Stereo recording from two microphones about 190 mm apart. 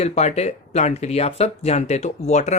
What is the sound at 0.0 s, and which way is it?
Speech, 35° left (ahead or behind).